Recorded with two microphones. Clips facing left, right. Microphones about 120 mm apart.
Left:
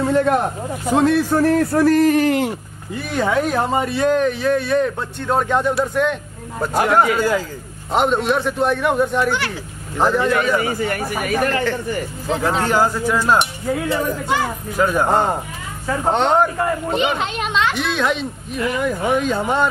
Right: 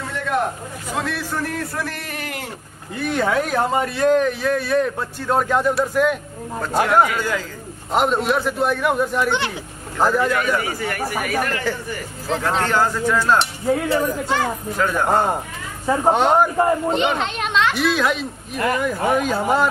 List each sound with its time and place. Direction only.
0.1 s a man's voice: 40° left (ahead or behind)
3.1 s speech: centre (ahead or behind)
6.6 s speech: 10° left (ahead or behind)
7.9 s speech: centre (ahead or behind)
10.3 s speech: 25° left (ahead or behind)
12.3 s speech: 5° left (ahead or behind)
15.9 s speech: 10° right (ahead or behind)
16.5 s speech: 25° right (ahead or behind)
16.9 s speech: 5° left (ahead or behind)